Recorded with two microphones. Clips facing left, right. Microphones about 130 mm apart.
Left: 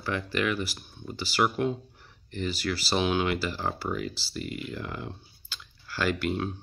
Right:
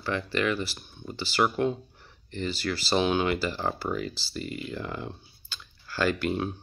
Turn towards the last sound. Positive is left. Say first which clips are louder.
# right 1 dB
turn(degrees=0)  # may be behind; listen again after turning